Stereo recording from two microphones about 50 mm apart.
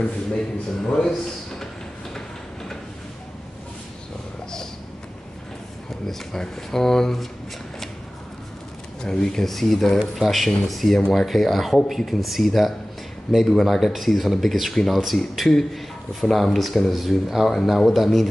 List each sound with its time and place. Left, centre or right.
0.7 s speech: centre
6.0 s speech: centre
9.0 s speech: centre